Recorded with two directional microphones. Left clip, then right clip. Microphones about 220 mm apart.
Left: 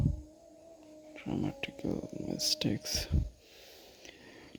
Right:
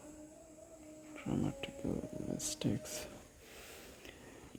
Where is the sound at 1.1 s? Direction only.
15° left (ahead or behind).